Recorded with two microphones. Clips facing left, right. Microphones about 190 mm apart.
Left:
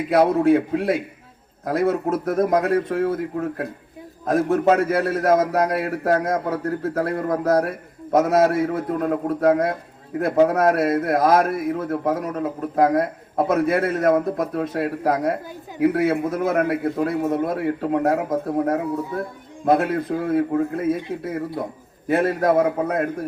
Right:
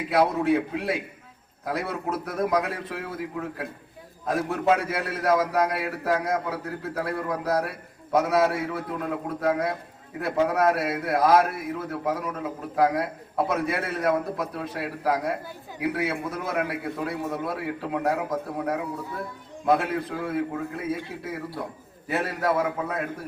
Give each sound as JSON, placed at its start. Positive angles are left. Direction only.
{"t": 0.1, "sound": "a man's voice", "side_deg": 45}
{"t": 4.3, "sound": "a man's voice", "side_deg": 45}
{"t": 22.1, "sound": "a man's voice", "side_deg": 45}